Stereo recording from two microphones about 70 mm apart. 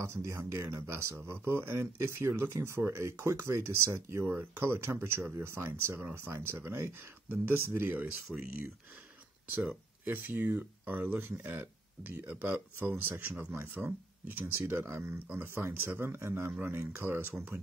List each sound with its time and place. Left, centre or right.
0.0 s speech: right
9.7 s speech: right